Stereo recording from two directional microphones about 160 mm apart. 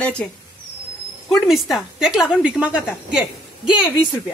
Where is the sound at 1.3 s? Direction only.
Centre (ahead or behind).